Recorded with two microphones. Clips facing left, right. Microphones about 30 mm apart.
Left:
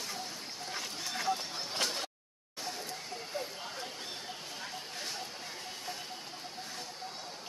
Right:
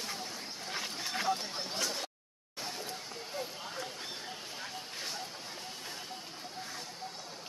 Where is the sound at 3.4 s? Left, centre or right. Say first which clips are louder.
Right 2 dB; centre.